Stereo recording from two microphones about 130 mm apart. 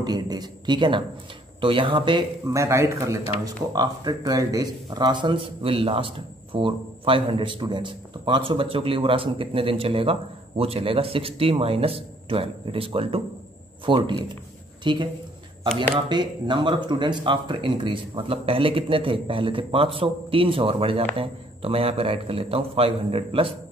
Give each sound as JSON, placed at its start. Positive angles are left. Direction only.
{"t": 0.0, "sound": "speech", "side_deg": -30}
{"t": 2.4, "sound": "speech", "side_deg": -20}
{"t": 16.1, "sound": "speech", "side_deg": -35}